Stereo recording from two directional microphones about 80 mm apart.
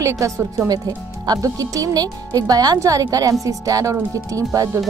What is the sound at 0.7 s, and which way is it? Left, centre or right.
Speech, right.